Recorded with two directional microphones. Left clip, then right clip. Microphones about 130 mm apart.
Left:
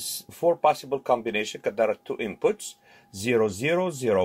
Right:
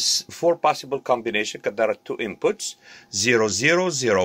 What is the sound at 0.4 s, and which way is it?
Speech, 10° left (ahead or behind).